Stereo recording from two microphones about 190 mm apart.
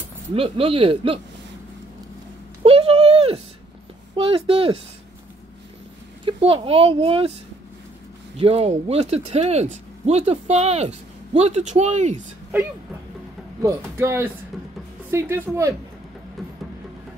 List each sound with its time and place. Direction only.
0.3 s speech: 30° right (ahead or behind)
2.6 s a sound: 30° right (ahead or behind)
4.1 s speech: 30° right (ahead or behind)
6.2 s speech: 30° right (ahead or behind)
8.4 s speech: 30° right (ahead or behind)
13.6 s speech: 15° right (ahead or behind)